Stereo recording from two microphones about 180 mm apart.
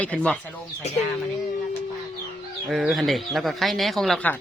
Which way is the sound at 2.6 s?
Centre (ahead or behind).